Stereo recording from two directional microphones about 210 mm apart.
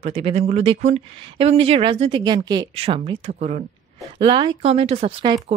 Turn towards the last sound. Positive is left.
turn(degrees=-30)  # may be behind; listen again after turning